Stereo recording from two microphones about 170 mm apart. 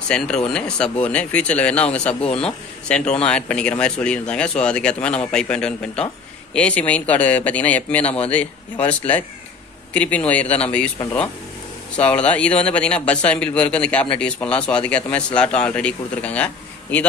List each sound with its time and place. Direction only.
0.1 s a man's voice: 5° left (ahead or behind)
8.0 s speech: 35° left (ahead or behind)
8.3 s a man's voice: 10° left (ahead or behind)